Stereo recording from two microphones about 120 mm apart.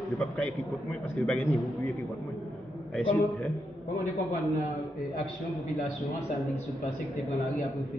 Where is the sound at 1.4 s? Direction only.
25° left (ahead or behind).